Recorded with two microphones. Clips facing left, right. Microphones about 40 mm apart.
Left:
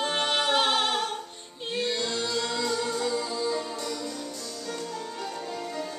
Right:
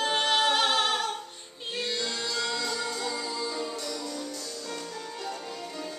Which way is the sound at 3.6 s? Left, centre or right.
Centre.